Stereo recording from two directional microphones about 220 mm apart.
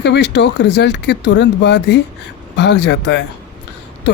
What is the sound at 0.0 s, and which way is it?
Speech, 50° left (ahead or behind).